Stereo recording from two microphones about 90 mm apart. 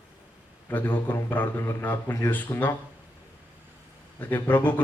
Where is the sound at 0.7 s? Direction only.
20° left (ahead or behind).